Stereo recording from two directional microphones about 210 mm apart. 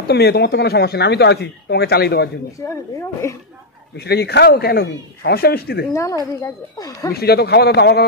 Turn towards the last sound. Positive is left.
turn(degrees=50)  # may be behind; listen again after turning